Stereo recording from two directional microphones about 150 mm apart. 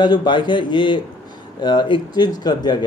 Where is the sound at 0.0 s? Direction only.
30° left (ahead or behind).